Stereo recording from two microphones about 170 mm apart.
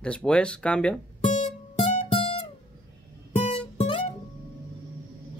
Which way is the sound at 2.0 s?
35° left (ahead or behind).